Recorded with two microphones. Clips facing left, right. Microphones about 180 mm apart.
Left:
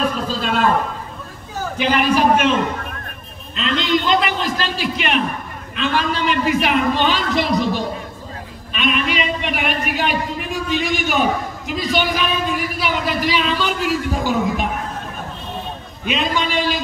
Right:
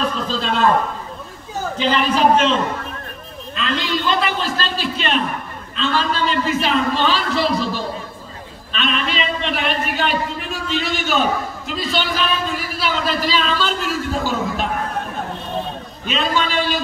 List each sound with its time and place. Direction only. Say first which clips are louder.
0.0 s a man's voice: left 1 dB; 10° left (ahead or behind)
1.8 s a man's voice: left 1 dB; 10° left (ahead or behind)
3.5 s a man's voice: left 3 dB; 20° left (ahead or behind)
16.1 s a man's voice: even; 15° left (ahead or behind)